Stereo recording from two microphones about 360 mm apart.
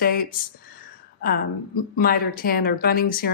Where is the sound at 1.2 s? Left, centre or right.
Left.